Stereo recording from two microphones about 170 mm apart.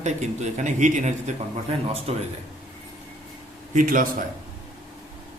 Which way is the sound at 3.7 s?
50° right (ahead or behind).